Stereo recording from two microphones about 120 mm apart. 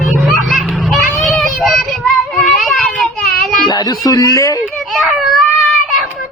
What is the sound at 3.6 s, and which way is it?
Speech, 35° left (ahead or behind).